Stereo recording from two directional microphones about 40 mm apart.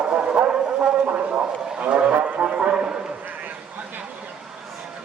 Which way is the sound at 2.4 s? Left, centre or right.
Right.